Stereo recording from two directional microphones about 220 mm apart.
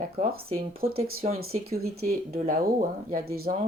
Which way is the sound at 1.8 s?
75° right (ahead or behind).